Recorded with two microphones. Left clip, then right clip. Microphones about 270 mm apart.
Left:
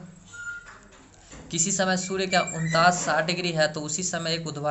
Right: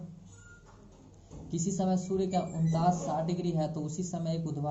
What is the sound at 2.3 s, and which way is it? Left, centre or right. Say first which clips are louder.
Speech: left 10 dB; left.